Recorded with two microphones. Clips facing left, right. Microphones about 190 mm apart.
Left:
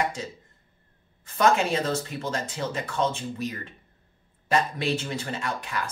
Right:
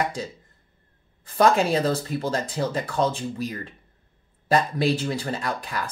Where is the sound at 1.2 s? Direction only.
35° right (ahead or behind).